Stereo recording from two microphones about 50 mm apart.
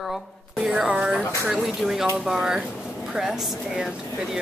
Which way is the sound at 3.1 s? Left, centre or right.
Centre.